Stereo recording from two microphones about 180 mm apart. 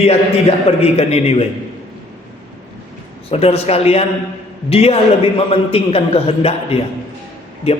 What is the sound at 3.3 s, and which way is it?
Speech, 35° left (ahead or behind).